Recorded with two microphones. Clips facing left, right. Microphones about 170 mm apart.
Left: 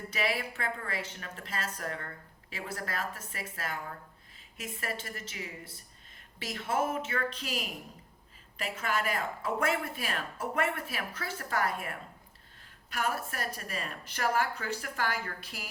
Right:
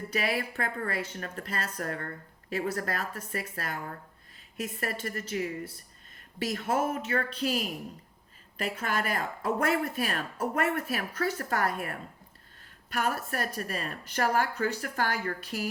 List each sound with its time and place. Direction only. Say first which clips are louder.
0.1 s a woman's voice: right 2 dB; 45° right (ahead or behind)